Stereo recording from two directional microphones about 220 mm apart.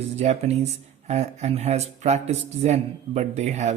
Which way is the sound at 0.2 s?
30° right (ahead or behind).